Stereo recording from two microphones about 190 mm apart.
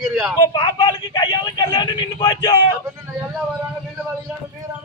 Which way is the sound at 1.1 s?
25° left (ahead or behind).